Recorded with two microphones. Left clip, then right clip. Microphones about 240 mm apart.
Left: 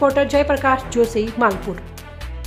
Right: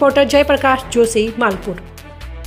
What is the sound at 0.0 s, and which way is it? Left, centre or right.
A woman's voice, centre.